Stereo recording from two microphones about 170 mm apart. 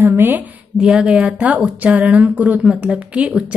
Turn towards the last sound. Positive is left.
turn(degrees=-10)  # may be behind; listen again after turning